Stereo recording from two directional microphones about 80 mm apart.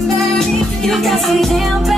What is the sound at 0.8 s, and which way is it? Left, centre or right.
Music, centre.